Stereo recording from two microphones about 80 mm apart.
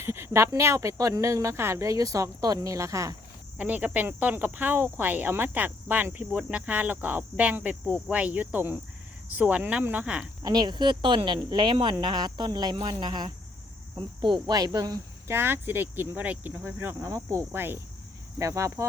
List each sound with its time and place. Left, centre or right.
0.0 s speech: right
3.6 s speech: centre
10.4 s speech: right
13.9 s speech: right
14.4 s speech: right
15.3 s speech: right
18.3 s speech: right